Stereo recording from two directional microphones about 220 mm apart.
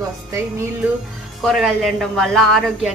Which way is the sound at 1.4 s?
Centre (ahead or behind).